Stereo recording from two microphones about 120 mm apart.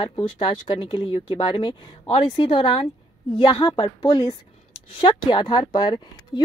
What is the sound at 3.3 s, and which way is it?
A woman's voice, 35° left (ahead or behind).